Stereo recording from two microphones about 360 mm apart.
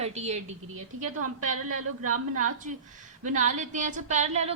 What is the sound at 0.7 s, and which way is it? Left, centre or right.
A woman's voice, right.